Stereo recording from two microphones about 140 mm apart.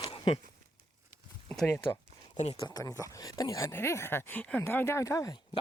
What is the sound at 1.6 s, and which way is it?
Speech, 15° left (ahead or behind).